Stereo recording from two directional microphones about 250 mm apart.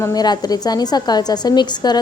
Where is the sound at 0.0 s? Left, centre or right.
Centre.